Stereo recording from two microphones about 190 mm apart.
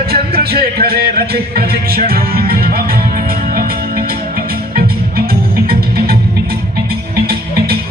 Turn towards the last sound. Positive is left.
turn(degrees=-55)  # may be behind; listen again after turning